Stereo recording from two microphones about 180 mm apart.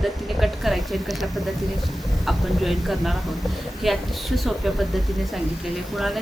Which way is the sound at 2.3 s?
Centre (ahead or behind).